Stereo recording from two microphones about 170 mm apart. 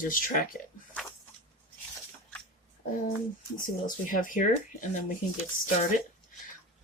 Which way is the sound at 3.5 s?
50° left (ahead or behind).